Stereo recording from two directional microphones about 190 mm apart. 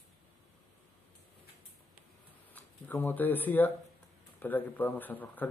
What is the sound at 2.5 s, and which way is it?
Speech, 10° left (ahead or behind).